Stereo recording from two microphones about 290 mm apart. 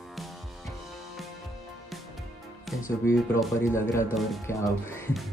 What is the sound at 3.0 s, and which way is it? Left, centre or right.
Speech, centre.